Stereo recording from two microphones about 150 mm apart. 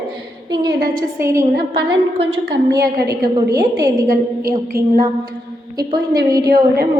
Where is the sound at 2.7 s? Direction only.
20° right (ahead or behind).